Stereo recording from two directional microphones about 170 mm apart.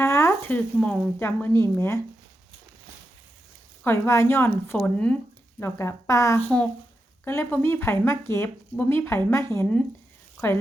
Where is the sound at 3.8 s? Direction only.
15° left (ahead or behind).